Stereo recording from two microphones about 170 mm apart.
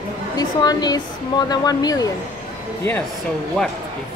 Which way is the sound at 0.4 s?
25° left (ahead or behind).